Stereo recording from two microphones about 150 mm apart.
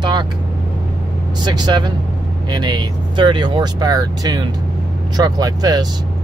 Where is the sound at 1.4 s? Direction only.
30° right (ahead or behind).